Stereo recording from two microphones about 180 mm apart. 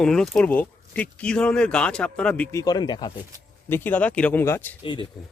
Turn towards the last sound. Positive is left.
turn(degrees=25)  # may be behind; listen again after turning